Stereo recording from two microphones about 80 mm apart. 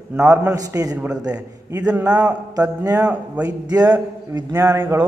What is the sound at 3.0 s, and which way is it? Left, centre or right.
Speech, centre.